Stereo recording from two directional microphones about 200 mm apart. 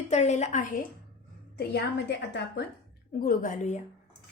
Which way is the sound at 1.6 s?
60° left (ahead or behind).